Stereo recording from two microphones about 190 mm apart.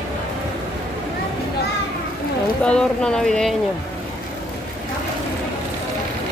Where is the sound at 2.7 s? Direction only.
5° left (ahead or behind).